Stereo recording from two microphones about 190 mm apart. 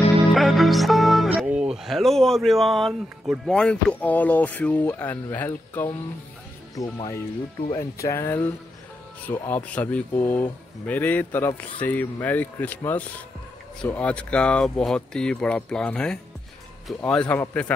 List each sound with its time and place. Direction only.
0.3 s speech: centre (ahead or behind)